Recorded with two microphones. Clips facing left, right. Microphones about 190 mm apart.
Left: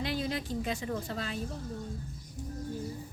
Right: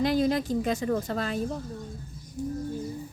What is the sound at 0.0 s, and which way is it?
Speech, 45° right (ahead or behind).